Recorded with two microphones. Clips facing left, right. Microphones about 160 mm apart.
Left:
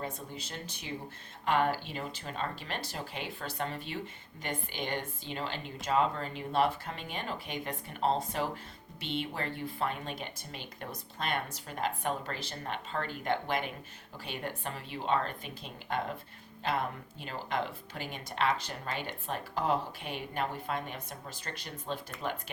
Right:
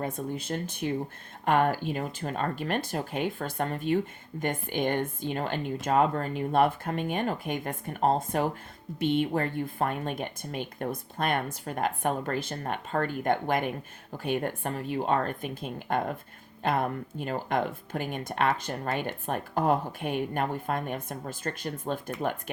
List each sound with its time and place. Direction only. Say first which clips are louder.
0.0 s speech: right 8 dB; 50° right (ahead or behind)